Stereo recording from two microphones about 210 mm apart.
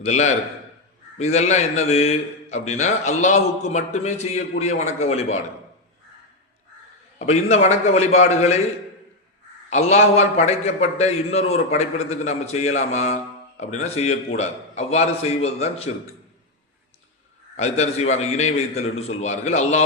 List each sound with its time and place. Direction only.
0.0 s a man's voice: 30° left (ahead or behind)
7.2 s a man's voice: 30° left (ahead or behind)
9.6 s a man's voice: 30° left (ahead or behind)
17.6 s a man's voice: 30° left (ahead or behind)